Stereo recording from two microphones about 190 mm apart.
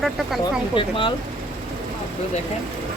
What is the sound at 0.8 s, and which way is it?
Speech, 25° left (ahead or behind).